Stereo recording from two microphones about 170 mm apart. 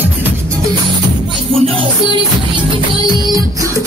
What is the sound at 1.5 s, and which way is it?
Music, 35° right (ahead or behind).